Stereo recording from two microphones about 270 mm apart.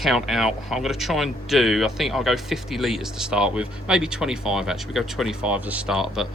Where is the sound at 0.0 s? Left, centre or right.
Centre.